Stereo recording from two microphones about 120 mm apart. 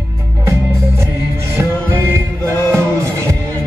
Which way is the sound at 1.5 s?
20° right (ahead or behind).